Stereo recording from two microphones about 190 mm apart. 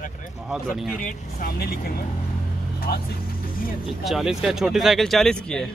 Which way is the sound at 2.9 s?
55° left (ahead or behind).